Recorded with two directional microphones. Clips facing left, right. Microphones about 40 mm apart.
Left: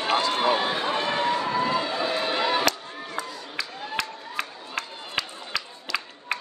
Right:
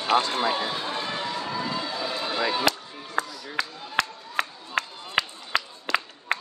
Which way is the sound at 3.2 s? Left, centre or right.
Right.